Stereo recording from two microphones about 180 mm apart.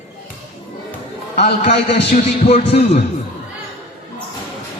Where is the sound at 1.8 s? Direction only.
35° left (ahead or behind).